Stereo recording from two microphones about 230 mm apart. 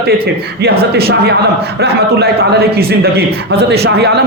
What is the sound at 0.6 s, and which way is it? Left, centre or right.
A man's voice, right.